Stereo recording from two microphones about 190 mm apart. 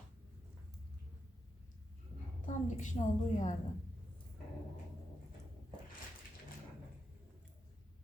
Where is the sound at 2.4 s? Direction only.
40° left (ahead or behind).